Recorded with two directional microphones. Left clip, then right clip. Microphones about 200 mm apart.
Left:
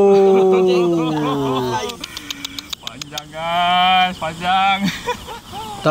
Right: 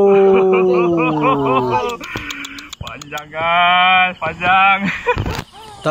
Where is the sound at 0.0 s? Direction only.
15° left (ahead or behind).